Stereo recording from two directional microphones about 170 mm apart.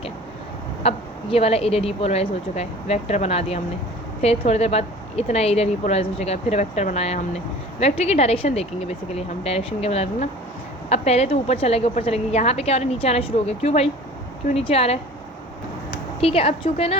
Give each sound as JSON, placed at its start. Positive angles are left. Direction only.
{"t": 0.8, "sound": "a woman's voice", "side_deg": 35}
{"t": 16.2, "sound": "a woman's voice", "side_deg": 35}